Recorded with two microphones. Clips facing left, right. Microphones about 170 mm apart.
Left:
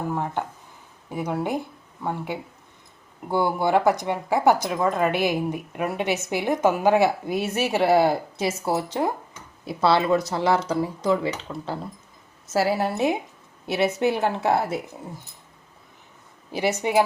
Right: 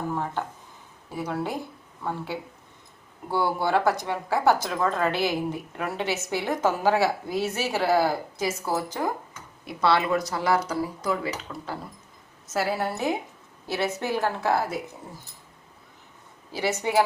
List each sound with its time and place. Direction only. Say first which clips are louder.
0.1 s a woman's voice: left 2 dB; 15° left (ahead or behind)
16.5 s speech: left 3 dB; 20° left (ahead or behind)